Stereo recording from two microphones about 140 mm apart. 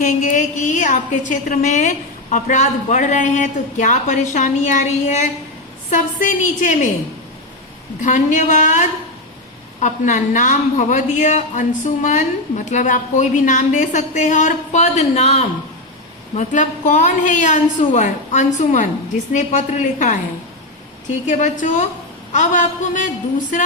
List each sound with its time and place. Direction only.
0.0 s a woman's voice: 60° left (ahead or behind)
8.0 s a woman's voice: 65° left (ahead or behind)